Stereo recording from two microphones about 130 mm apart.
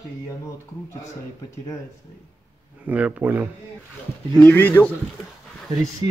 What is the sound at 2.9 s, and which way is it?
Speech, 10° right (ahead or behind).